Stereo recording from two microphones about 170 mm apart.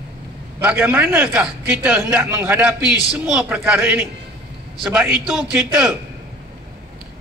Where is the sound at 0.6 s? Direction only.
10° right (ahead or behind).